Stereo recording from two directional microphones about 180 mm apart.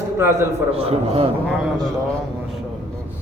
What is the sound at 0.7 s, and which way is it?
Speech, 35° right (ahead or behind).